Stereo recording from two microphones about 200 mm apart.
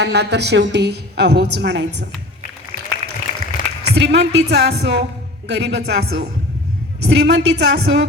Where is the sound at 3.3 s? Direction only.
35° left (ahead or behind).